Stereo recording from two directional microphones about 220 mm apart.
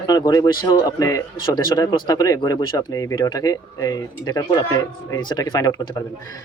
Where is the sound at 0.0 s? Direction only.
15° left (ahead or behind).